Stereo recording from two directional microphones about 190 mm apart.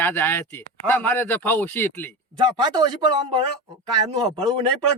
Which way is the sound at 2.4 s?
20° right (ahead or behind).